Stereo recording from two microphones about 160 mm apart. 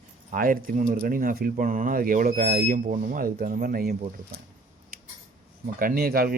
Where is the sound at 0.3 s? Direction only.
60° right (ahead or behind).